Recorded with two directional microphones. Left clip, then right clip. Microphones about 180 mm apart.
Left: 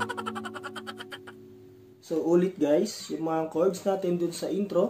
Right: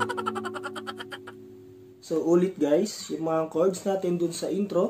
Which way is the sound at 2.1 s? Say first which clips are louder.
Right 1 dB; 20° right (ahead or behind).